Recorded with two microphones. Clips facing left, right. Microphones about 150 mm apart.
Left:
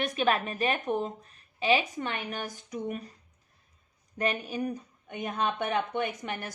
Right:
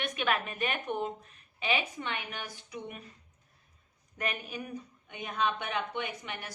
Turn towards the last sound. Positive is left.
turn(degrees=45)  # may be behind; listen again after turning